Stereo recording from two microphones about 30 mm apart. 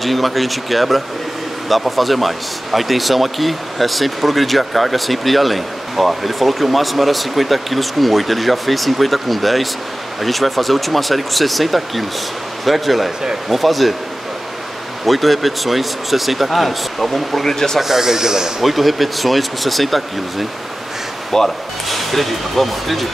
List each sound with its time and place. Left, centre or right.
0.0 s speech: centre
15.0 s speech: centre
17.5 s speech: centre
17.7 s speech: centre
18.6 s speech: centre
21.3 s speech: centre
21.8 s speech: centre